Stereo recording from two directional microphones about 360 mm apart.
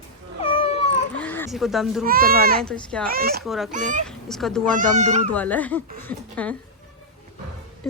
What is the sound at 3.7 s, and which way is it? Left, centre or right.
Speech, centre.